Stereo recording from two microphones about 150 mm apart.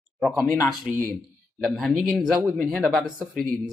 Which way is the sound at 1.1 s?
Centre (ahead or behind).